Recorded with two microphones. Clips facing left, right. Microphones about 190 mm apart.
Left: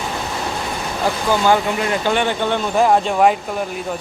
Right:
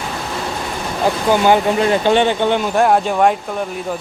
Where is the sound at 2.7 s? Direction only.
Centre (ahead or behind).